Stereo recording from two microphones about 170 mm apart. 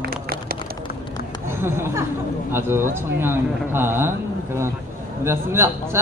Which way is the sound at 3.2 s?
15° right (ahead or behind).